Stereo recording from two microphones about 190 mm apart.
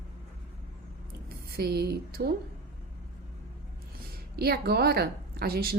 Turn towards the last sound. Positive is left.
turn(degrees=-55)  # may be behind; listen again after turning